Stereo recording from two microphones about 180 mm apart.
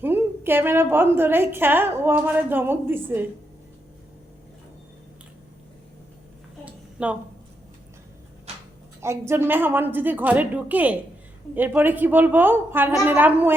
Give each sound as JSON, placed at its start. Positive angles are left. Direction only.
{"t": 0.0, "sound": "a woman's voice", "side_deg": -10}
{"t": 6.7, "sound": "a sound", "side_deg": -10}
{"t": 9.0, "sound": "a woman's voice", "side_deg": -15}